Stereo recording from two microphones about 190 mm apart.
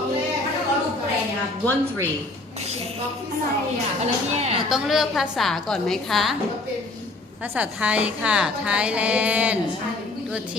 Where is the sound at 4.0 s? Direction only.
35° right (ahead or behind).